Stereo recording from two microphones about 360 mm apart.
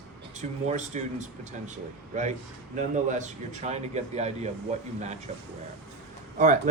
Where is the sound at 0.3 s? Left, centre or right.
Centre.